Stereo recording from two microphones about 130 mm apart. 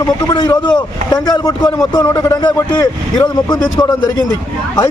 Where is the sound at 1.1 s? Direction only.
30° left (ahead or behind).